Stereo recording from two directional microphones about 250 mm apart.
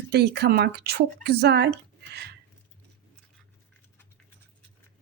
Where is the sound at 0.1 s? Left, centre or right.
Right.